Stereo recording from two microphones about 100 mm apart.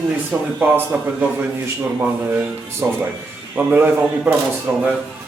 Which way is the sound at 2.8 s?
20° right (ahead or behind).